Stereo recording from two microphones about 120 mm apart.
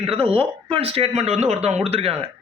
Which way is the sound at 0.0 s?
50° right (ahead or behind).